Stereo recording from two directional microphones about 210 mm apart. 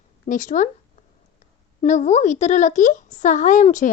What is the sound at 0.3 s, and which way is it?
Speech, 35° left (ahead or behind).